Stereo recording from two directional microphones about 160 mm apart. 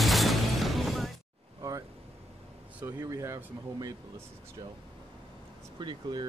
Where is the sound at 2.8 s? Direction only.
20° right (ahead or behind).